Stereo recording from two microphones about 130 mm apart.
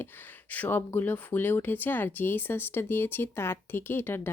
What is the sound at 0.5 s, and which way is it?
Speech, 15° left (ahead or behind).